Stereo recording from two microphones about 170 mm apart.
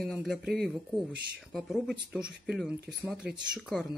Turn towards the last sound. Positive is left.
turn(degrees=-5)  # may be behind; listen again after turning